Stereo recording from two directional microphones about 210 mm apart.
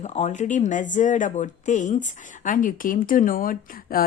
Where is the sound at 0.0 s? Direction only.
35° left (ahead or behind).